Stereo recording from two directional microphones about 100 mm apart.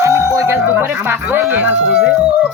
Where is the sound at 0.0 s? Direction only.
30° right (ahead or behind); by 2.1 s 10° right (ahead or behind).